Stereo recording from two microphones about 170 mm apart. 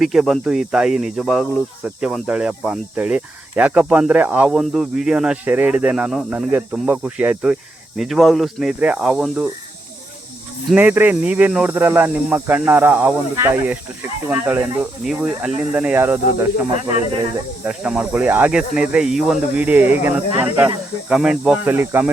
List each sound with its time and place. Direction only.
0.0 s speech: centre (ahead or behind)
10.8 s speech: 10° right (ahead or behind)
17.7 s speech: 5° right (ahead or behind)